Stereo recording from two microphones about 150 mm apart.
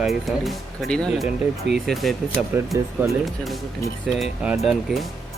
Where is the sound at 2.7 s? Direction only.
20° right (ahead or behind).